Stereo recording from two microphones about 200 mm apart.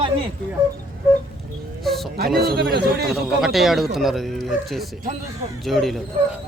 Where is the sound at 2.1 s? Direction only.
50° right (ahead or behind).